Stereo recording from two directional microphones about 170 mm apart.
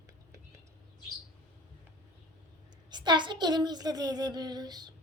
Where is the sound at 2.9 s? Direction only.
25° right (ahead or behind).